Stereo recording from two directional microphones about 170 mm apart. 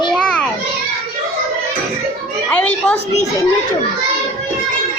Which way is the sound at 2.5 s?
5° left (ahead or behind).